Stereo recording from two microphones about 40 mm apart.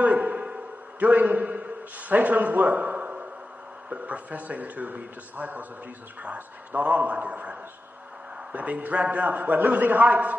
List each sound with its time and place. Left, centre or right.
0.0 s a sound: right
0.9 s a man's voice: right
8.5 s a man's voice: right